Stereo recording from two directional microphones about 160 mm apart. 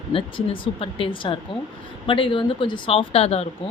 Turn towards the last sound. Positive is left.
turn(degrees=40)  # may be behind; listen again after turning